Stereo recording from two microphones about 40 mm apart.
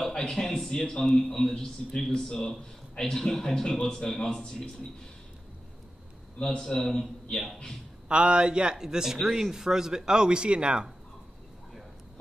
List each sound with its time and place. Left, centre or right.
0.1 s a man's voice: centre
4.2 s a man's voice: centre
6.6 s a man's voice: centre
8.1 s a man's voice: right